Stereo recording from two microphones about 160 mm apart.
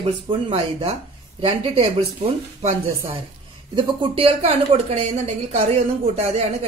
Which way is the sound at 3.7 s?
35° right (ahead or behind).